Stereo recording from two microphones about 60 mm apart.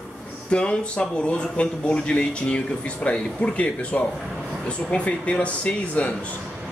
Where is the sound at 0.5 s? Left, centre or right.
Centre.